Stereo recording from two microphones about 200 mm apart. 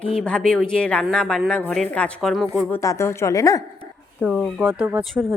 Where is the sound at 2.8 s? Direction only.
15° left (ahead or behind).